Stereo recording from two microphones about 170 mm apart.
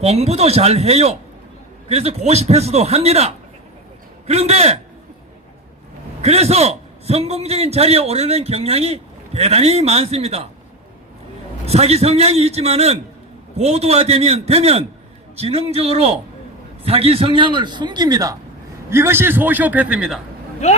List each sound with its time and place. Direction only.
0.0 s a man's voice: 40° right (ahead or behind)
6.2 s a man's voice: 40° right (ahead or behind)
11.6 s a man's voice: 35° right (ahead or behind); by 20.2 s 5° right (ahead or behind)